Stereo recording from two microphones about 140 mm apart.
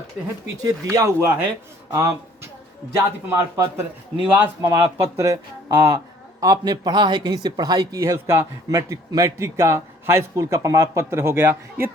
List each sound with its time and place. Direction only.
0.6 s speech: 20° right (ahead or behind)